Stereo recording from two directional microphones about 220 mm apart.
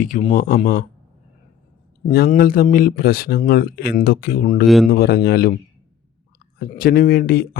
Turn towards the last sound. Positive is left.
turn(degrees=40)  # may be behind; listen again after turning